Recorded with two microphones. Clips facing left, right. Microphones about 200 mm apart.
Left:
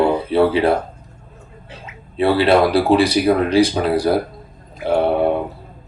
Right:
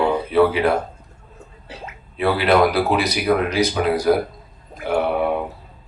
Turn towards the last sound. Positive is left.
turn(degrees=30)  # may be behind; listen again after turning